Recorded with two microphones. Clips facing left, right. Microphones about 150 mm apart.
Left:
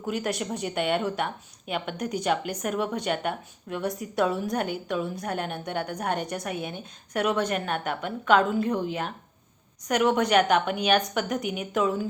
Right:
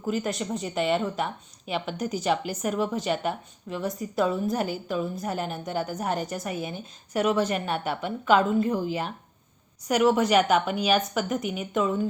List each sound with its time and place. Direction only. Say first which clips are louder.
0.0 s a woman's voice: right 1 dB; centre (ahead or behind)